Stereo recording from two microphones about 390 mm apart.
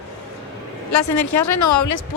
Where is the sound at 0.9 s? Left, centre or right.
Left.